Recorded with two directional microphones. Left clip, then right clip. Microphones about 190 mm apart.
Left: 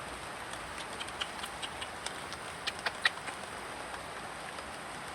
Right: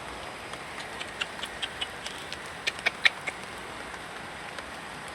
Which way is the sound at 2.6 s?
35° right (ahead or behind).